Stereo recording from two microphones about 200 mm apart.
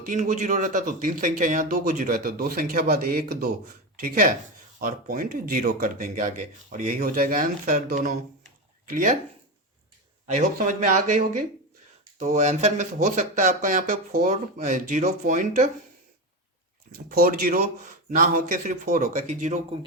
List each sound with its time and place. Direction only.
0.0 s a man's voice: 40° right (ahead or behind)
4.8 s a man's voice: 45° right (ahead or behind)
10.2 s speech: 35° right (ahead or behind)
17.1 s speech: 50° right (ahead or behind)